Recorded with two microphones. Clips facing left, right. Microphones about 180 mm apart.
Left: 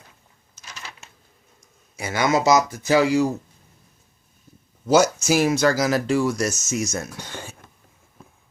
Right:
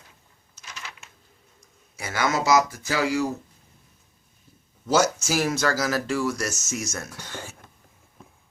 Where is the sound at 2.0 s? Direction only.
15° left (ahead or behind).